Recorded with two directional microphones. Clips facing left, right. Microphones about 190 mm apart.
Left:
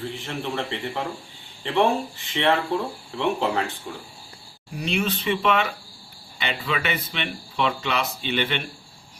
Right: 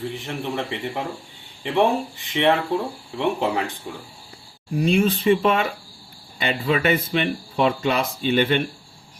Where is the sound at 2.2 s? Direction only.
15° right (ahead or behind).